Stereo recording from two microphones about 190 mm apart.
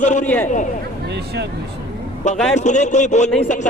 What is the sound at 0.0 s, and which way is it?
Speech, 40° left (ahead or behind).